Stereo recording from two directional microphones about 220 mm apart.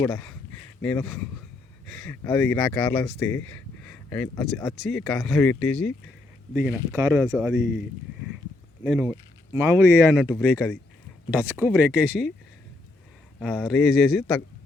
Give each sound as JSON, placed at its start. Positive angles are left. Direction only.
{"t": 0.0, "sound": "speech", "side_deg": 5}
{"t": 6.7, "sound": "speech", "side_deg": -10}
{"t": 8.8, "sound": "speech", "side_deg": -5}
{"t": 13.4, "sound": "speech", "side_deg": 0}